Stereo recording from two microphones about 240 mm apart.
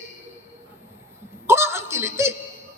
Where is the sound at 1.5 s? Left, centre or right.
Centre.